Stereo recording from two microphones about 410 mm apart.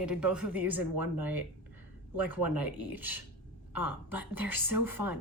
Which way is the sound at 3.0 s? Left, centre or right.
Centre.